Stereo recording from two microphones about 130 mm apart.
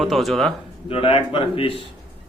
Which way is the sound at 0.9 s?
45° left (ahead or behind).